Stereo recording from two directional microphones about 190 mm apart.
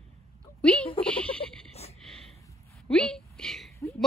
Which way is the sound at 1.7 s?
35° left (ahead or behind).